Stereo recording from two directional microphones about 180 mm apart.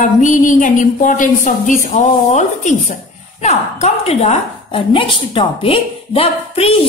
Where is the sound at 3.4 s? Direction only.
35° left (ahead or behind).